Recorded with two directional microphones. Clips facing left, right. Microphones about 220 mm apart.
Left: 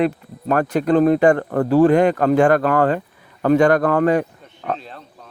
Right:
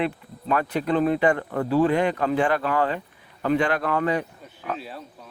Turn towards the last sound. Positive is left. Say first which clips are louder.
# right 1 dB
turn(degrees=-5)  # may be behind; listen again after turning